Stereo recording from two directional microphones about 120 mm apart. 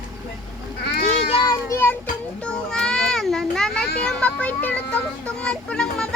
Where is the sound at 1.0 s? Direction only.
55° left (ahead or behind).